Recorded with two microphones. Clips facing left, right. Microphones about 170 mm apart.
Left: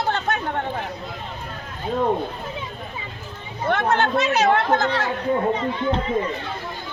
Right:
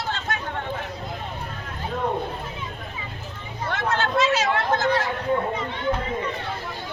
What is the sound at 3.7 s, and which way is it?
Speech, 60° left (ahead or behind).